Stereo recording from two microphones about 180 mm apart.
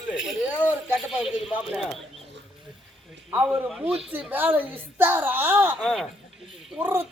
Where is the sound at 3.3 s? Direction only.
10° right (ahead or behind).